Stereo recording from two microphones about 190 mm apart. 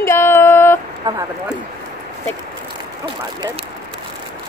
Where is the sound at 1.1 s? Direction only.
20° right (ahead or behind).